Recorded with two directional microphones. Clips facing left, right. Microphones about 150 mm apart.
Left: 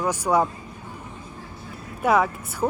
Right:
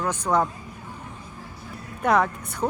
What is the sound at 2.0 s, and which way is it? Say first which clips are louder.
Speech: left 1 dB; 5° left (ahead or behind).